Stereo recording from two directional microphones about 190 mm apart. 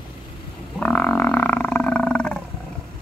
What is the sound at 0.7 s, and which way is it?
Wild animals, 5° left (ahead or behind).